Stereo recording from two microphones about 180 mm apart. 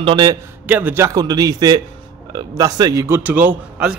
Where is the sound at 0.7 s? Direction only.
10° right (ahead or behind).